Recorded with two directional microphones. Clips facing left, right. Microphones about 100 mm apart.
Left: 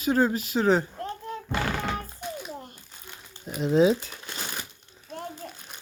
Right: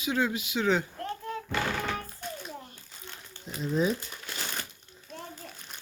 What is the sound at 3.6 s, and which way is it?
Speech, 80° left.